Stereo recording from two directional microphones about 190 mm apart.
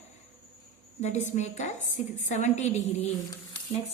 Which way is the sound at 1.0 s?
35° left (ahead or behind).